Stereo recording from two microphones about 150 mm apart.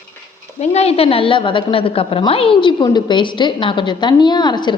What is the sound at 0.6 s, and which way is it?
A woman's voice, 45° left (ahead or behind).